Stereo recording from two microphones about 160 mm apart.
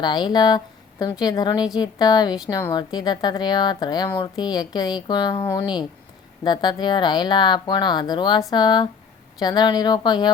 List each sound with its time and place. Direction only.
0.0 s a woman's voice: 25° left (ahead or behind)